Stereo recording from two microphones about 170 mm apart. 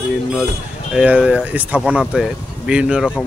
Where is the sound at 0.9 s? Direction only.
5° right (ahead or behind).